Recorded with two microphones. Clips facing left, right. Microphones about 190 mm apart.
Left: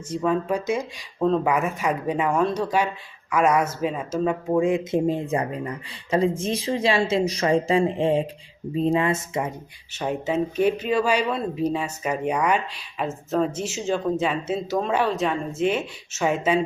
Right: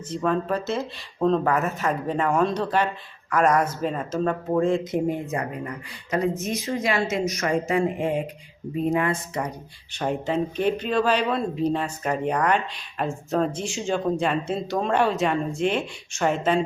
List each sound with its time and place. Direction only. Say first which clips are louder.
0.1 s speech: left 1 dB; 10° left (ahead or behind); by 9.6 s 25° left (ahead or behind)
9.9 s speech: even; 5° left (ahead or behind)